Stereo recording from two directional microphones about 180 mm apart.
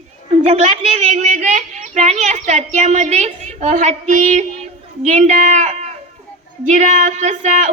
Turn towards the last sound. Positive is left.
turn(degrees=-40)  # may be behind; listen again after turning